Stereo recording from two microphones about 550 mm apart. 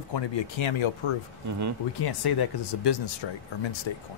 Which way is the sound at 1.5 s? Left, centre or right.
Right.